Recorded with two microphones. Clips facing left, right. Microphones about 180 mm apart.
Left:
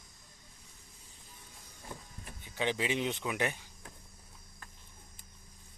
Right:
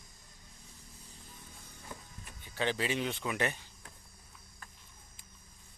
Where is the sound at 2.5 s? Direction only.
15° left (ahead or behind).